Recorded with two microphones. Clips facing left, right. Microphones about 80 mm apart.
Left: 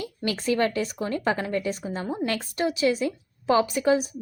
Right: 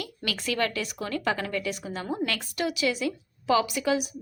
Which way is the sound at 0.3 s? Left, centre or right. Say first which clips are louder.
Left 5 dB; left.